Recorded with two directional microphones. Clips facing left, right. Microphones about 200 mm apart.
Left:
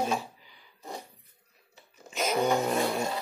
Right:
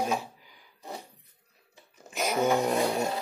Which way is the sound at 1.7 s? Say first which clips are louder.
Even; 15° right (ahead or behind).